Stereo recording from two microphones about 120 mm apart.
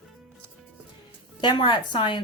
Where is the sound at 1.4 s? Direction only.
40° left (ahead or behind).